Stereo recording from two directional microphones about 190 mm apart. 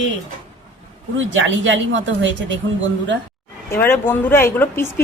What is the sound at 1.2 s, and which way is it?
Speech, 80° right.